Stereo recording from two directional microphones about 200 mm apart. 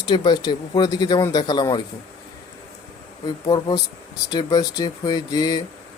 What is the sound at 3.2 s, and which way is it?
Speech, 20° left (ahead or behind).